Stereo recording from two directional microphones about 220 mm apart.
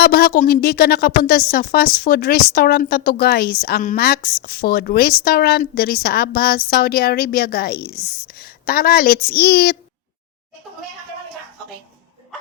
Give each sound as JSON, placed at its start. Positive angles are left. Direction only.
{"t": 0.0, "sound": "a woman's voice", "side_deg": 45}